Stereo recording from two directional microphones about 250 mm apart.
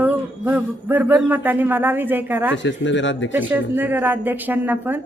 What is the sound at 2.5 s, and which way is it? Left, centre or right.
Speech, left.